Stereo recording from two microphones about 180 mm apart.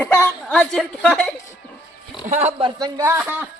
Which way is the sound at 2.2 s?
45° right (ahead or behind).